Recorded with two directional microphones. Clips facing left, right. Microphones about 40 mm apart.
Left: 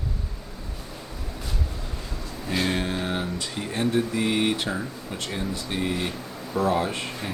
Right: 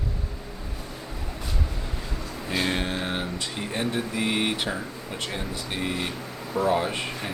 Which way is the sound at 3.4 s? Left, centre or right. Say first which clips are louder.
Left 2 dB; centre.